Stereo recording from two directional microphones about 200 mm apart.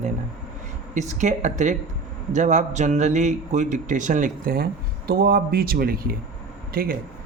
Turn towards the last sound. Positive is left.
turn(degrees=-50)  # may be behind; listen again after turning